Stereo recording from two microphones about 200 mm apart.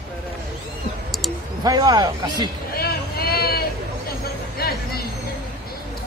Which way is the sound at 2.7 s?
50° left (ahead or behind).